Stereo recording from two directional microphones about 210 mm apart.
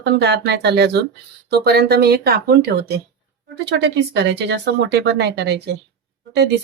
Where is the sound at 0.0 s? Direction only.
55° right (ahead or behind).